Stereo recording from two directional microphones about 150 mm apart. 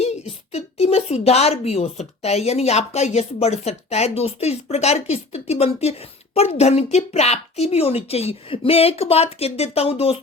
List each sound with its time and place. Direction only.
0.5 s a woman's voice: 45° left (ahead or behind)